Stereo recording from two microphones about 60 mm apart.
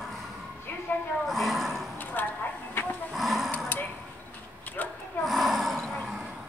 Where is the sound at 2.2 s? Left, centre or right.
Left.